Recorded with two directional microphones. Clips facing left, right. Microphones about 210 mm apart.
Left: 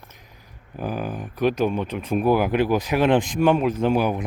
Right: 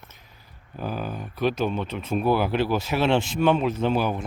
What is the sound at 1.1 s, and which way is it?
Speech, 15° left (ahead or behind).